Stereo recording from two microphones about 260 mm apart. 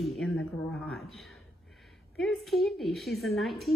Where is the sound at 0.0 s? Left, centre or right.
Centre.